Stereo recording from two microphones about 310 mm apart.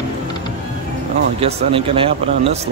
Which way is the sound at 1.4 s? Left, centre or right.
Centre.